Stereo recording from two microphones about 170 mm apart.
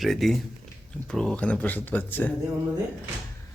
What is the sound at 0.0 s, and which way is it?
Speech, centre (ahead or behind).